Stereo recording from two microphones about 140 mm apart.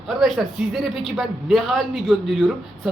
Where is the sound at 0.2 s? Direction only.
Centre (ahead or behind).